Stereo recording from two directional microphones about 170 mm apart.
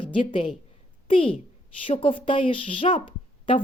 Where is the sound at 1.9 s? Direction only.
30° left (ahead or behind).